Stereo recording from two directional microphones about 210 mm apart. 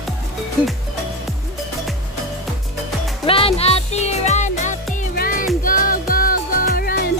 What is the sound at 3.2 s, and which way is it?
Music, 25° left (ahead or behind).